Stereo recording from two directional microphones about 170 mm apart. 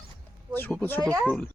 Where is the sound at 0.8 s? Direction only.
10° left (ahead or behind).